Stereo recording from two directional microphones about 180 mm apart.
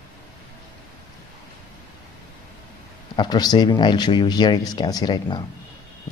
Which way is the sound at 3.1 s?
25° left (ahead or behind).